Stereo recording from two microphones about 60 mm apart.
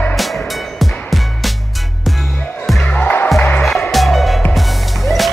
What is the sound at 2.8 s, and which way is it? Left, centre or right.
Music, left.